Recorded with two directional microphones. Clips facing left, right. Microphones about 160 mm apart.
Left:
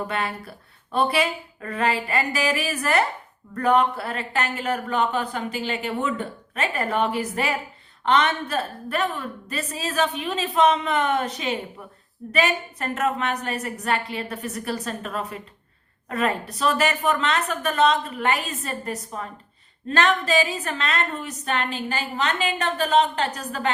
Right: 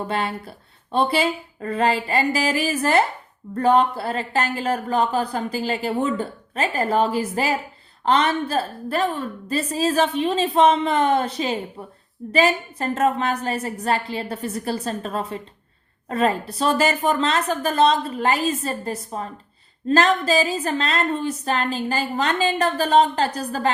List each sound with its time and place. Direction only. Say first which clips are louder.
0.1 s speech: right 3 dB; 30° right (ahead or behind)